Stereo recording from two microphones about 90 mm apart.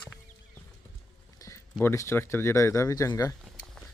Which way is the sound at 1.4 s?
35° left (ahead or behind).